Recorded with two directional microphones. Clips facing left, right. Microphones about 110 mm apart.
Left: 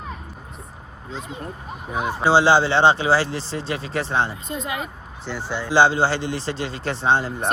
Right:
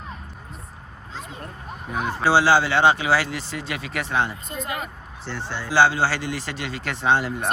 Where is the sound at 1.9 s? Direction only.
15° left (ahead or behind).